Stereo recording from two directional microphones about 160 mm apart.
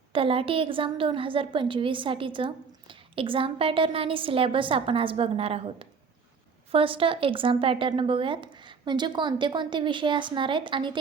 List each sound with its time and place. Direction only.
0.1 s a woman's voice: 35° right (ahead or behind)